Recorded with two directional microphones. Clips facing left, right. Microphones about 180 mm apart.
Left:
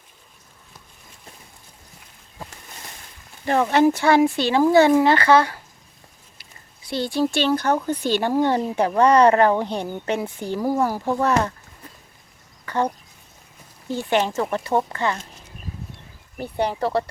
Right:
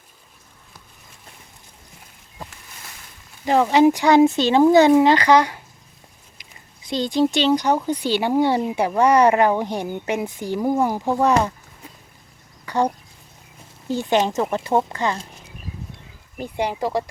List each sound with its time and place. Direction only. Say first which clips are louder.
3.4 s speech: right 2 dB; 15° right (ahead or behind)
12.6 s a sound: right 2 dB; 10° right (ahead or behind)
13.9 s speech: right 2 dB; 15° right (ahead or behind)
16.4 s speech: even; 10° right (ahead or behind)